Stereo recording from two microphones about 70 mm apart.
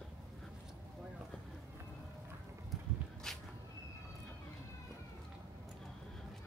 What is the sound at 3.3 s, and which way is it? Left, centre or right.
Vehicle, centre.